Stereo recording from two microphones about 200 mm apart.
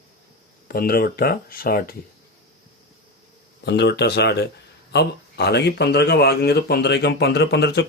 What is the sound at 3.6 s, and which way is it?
Speech, 55° left (ahead or behind).